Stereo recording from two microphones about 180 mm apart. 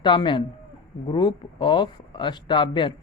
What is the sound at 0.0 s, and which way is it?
Speech, 25° left (ahead or behind).